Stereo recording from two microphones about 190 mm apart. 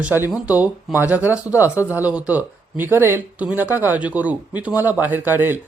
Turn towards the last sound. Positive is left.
turn(degrees=-10)  # may be behind; listen again after turning